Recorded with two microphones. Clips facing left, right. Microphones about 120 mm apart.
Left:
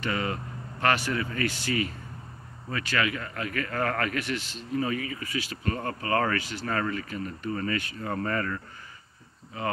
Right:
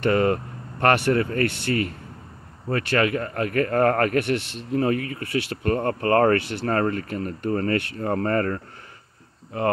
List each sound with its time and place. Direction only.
0.0 s speech: 50° right (ahead or behind)